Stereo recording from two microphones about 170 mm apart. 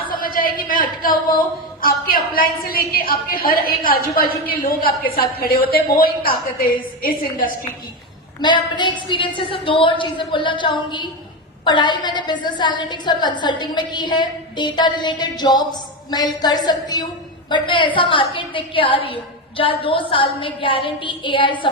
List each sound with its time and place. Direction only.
0.2 s a sound: 55° left (ahead or behind)
1.8 s a woman's voice: 60° left (ahead or behind)
8.4 s a woman's voice: 25° left (ahead or behind)